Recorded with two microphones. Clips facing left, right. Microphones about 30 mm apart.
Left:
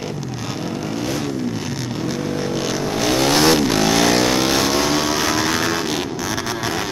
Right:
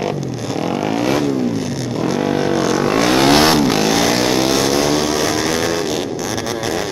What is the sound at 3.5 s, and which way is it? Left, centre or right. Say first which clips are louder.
Vehicle: right 2 dB; centre.